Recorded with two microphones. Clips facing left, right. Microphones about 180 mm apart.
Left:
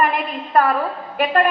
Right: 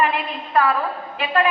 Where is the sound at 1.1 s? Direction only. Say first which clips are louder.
Left 4 dB; 45° left (ahead or behind).